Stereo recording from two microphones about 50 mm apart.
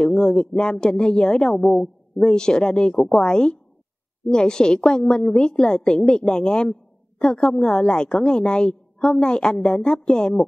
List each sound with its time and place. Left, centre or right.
0.0 s a woman's voice: centre